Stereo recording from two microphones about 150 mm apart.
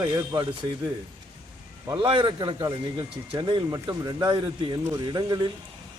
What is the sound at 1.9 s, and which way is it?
Speech, 35° right (ahead or behind).